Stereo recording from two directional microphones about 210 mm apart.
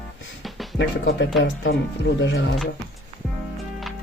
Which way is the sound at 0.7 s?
55° left (ahead or behind).